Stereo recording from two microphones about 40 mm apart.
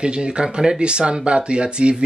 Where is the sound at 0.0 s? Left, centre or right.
Right.